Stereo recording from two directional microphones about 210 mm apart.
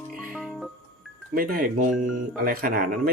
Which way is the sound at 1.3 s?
45° right (ahead or behind).